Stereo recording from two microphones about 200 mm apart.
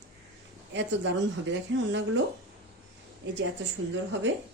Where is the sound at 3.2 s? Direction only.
60° right (ahead or behind).